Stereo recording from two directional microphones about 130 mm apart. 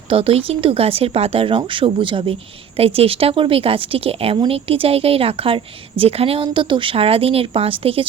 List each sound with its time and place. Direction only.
0.1 s speech: 45° right (ahead or behind)